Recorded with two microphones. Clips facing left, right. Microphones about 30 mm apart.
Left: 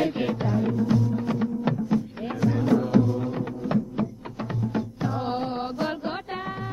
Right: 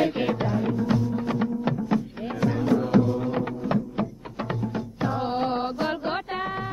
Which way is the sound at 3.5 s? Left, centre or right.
Centre.